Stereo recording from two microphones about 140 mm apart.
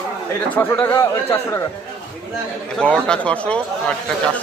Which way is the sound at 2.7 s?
5° left (ahead or behind).